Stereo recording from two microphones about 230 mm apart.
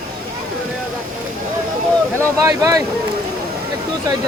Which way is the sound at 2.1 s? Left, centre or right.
Centre.